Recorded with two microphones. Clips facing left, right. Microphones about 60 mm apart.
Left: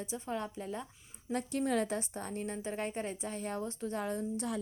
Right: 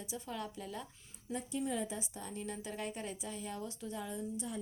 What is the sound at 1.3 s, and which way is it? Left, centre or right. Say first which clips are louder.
A woman's voice: left 5 dB; left.